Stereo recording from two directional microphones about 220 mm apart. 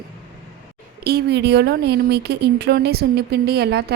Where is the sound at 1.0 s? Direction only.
45° right (ahead or behind).